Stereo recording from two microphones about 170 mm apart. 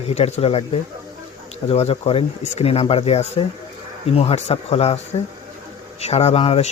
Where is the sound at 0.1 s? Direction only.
40° left (ahead or behind).